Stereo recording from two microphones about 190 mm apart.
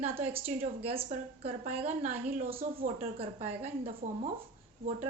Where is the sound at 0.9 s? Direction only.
30° right (ahead or behind).